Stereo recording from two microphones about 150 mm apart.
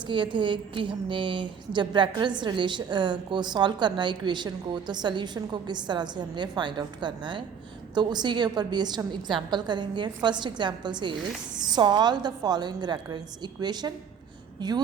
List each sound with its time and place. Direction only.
0.0 s a woman's voice: 30° right (ahead or behind)